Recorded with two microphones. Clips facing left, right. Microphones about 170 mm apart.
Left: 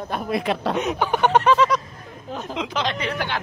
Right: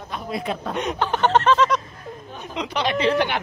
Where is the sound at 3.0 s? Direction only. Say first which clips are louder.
Right 7 dB; 25° right (ahead or behind).